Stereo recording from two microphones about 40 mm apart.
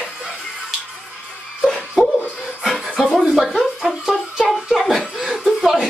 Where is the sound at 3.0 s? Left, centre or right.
Centre.